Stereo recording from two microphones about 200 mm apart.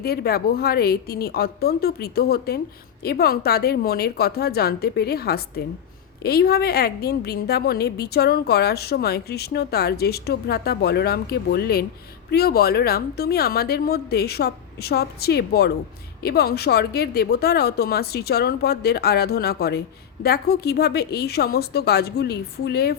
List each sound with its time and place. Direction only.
0.0 s a woman's voice: 50° left (ahead or behind)